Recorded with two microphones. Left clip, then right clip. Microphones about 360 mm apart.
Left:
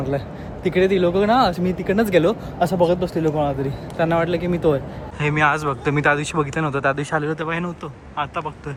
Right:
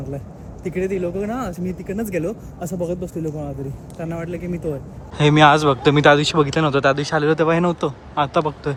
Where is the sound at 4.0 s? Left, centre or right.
Left.